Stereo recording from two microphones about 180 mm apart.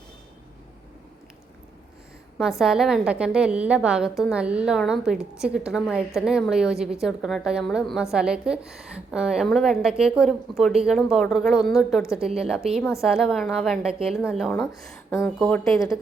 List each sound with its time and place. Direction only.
2.4 s a woman's voice: centre (ahead or behind)
14.7 s speech: 15° left (ahead or behind)